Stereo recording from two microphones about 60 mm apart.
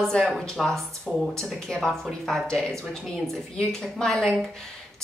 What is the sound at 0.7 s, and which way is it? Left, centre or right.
A woman's voice, centre.